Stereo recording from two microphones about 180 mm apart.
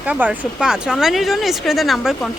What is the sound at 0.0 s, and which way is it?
Speech, 10° right (ahead or behind).